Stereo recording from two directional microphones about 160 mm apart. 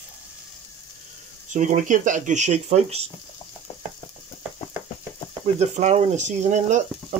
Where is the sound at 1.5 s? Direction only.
50° right (ahead or behind).